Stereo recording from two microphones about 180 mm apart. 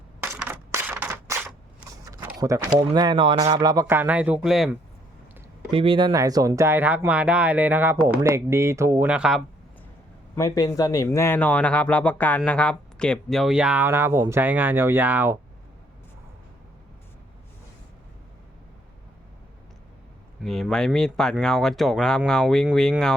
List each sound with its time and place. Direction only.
0.2 s crushing: 10° right (ahead or behind)
2.0 s a sound: 20° right (ahead or behind)
2.7 s speech: 25° right (ahead or behind); by 4.7 s centre (ahead or behind)
5.7 s speech: 30° right (ahead or behind); by 9.4 s 5° right (ahead or behind)
10.3 s speech: 20° left (ahead or behind); by 15.4 s 10° right (ahead or behind)
20.4 s speech: centre (ahead or behind)